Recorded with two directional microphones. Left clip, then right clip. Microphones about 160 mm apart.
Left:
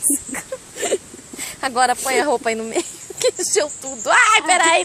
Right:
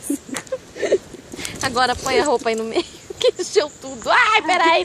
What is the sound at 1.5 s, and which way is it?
Speech, 55° left (ahead or behind).